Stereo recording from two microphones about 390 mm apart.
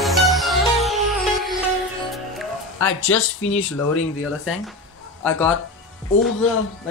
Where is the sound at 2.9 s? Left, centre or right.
Left.